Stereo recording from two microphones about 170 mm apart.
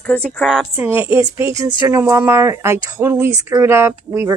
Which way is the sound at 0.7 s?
15° right (ahead or behind).